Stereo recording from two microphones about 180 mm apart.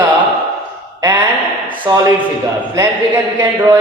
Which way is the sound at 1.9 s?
20° right (ahead or behind).